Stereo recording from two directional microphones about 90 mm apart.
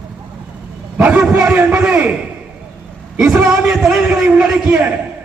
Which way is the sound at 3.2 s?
10° right (ahead or behind).